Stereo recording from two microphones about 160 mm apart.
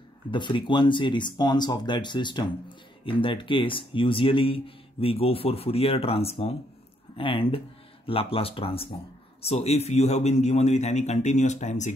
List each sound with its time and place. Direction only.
0.3 s a man's voice: 30° left (ahead or behind); by 11.9 s 45° left (ahead or behind)